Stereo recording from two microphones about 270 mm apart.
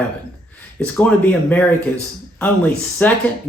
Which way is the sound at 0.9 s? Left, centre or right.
Centre.